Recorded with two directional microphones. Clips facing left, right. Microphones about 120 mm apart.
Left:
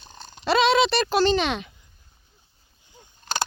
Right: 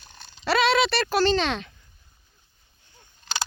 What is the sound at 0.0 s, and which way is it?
Dog, 35° left (ahead or behind).